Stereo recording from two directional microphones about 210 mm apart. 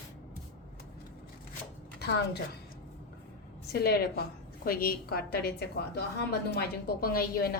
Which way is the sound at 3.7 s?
50° left (ahead or behind).